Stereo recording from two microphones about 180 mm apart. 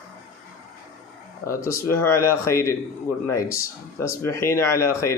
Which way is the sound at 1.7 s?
15° left (ahead or behind).